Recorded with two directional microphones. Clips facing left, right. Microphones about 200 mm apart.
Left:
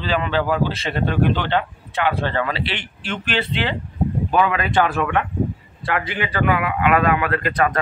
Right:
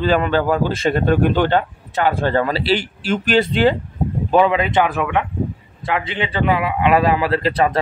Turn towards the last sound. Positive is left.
turn(degrees=-30)  # may be behind; listen again after turning